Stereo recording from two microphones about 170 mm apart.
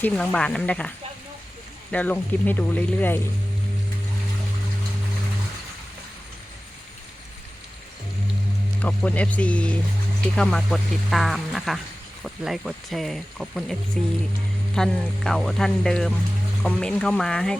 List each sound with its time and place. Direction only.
0.0 s speech: 5° left (ahead or behind)
8.8 s speech: 5° left (ahead or behind)
14.0 s music: 45° right (ahead or behind)
14.8 s speech: 5° left (ahead or behind)